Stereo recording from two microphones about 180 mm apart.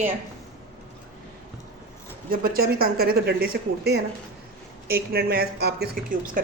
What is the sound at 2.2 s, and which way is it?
Speech, 55° right (ahead or behind).